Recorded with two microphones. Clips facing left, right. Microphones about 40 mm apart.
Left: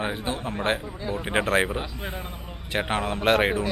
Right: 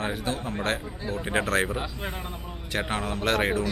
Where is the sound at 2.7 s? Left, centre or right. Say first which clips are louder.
Left 3 dB; left.